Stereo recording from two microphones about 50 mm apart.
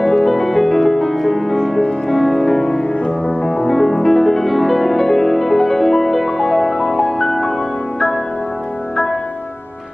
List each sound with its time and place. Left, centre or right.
0.0 s music: centre
3.4 s music: left
3.7 s music: centre